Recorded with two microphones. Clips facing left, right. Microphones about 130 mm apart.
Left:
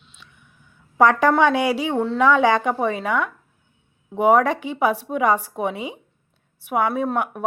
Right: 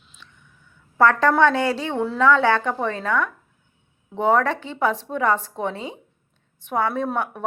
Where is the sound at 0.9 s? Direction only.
15° left (ahead or behind).